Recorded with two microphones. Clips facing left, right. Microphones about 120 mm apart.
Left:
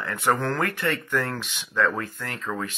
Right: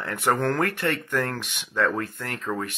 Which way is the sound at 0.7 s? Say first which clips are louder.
Even; 60° right (ahead or behind).